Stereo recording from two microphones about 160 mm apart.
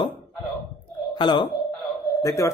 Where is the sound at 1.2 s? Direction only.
30° left (ahead or behind).